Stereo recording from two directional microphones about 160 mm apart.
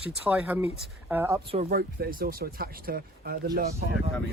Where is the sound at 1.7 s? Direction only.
65° right (ahead or behind).